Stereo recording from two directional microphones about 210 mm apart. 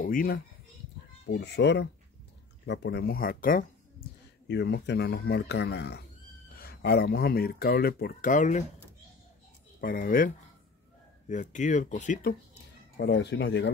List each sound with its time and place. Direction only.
0.0 s speech: 40° left (ahead or behind)
1.2 s speech: 55° left (ahead or behind)
4.5 s speech: 50° left (ahead or behind); by 8.6 s 35° left (ahead or behind)
9.8 s speech: 45° left (ahead or behind)
12.9 s speech: 55° left (ahead or behind)